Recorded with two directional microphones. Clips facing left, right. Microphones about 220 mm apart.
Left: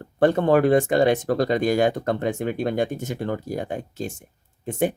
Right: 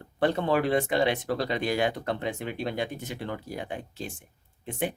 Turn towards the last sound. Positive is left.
turn(degrees=45)  # may be behind; listen again after turning